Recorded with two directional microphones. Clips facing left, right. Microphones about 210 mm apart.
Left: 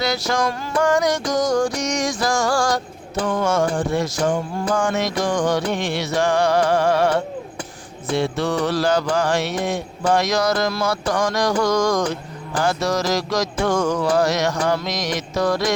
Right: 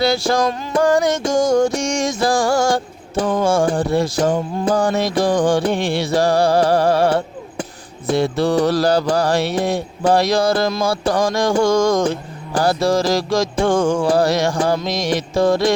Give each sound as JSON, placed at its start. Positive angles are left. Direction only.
{"t": 0.0, "sound": "music", "side_deg": -30}
{"t": 4.7, "sound": "mantra", "side_deg": -35}
{"t": 10.8, "sound": "music", "side_deg": -30}